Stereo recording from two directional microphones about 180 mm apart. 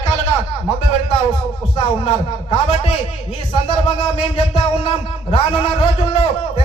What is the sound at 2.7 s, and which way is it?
Speech, 30° left (ahead or behind).